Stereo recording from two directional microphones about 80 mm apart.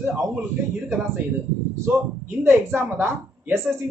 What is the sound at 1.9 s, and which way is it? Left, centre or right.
Speech, right.